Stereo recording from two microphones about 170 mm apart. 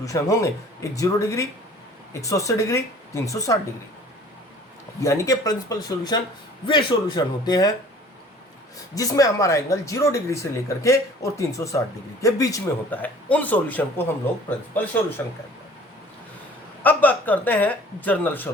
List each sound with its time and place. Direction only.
0.0 s speech: 20° left (ahead or behind)
4.9 s speech: 20° left (ahead or behind)
9.0 s speech: 20° left (ahead or behind)
16.8 s speech: 10° left (ahead or behind)